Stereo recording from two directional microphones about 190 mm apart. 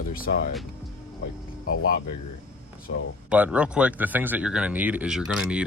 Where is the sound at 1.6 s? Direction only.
50° left (ahead or behind).